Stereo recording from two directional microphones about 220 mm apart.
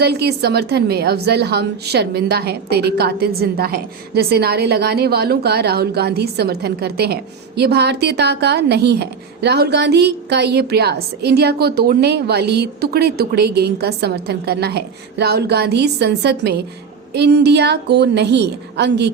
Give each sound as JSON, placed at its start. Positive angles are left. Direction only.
{"t": 0.0, "sound": "a woman's voice", "side_deg": -50}